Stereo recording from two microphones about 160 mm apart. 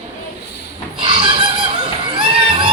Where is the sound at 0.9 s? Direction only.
35° right (ahead or behind).